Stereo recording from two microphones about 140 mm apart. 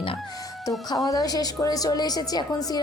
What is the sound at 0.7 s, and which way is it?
A woman's voice, 25° left (ahead or behind).